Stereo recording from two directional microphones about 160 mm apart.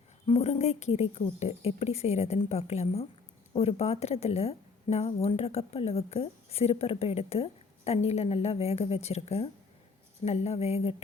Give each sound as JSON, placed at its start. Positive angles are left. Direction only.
{"t": 0.3, "sound": "speech", "side_deg": 40}